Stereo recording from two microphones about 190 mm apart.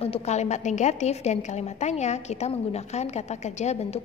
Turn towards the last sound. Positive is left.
turn(degrees=35)  # may be behind; listen again after turning